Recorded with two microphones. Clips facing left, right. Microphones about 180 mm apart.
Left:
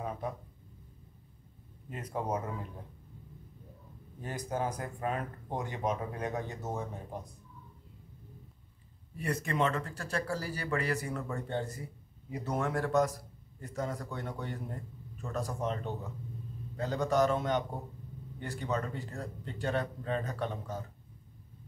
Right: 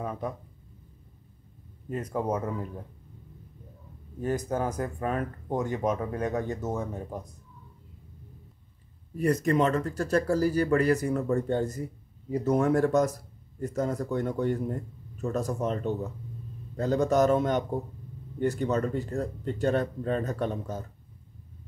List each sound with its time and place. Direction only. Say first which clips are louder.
1.9 s a man's voice: right 9 dB; 45° right (ahead or behind)
4.2 s a man's voice: right 6 dB; 45° right (ahead or behind)
9.1 s a man's voice: right 10 dB; 40° right (ahead or behind)